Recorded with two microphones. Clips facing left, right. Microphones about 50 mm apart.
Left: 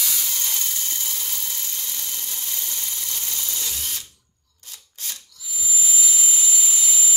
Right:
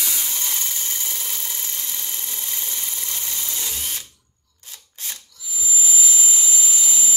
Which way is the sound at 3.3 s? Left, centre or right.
Right.